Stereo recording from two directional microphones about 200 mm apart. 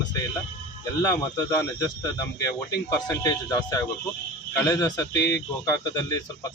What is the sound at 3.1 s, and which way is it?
Speech, 15° left (ahead or behind).